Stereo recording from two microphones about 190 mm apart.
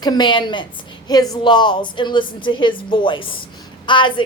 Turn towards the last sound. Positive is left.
turn(degrees=25)  # may be behind; listen again after turning